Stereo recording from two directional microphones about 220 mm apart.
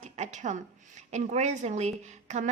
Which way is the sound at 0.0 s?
30° right (ahead or behind).